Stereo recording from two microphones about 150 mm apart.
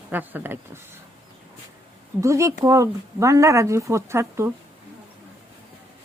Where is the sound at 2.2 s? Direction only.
20° right (ahead or behind).